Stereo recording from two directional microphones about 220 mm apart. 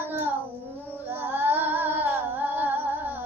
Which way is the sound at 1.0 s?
10° right (ahead or behind).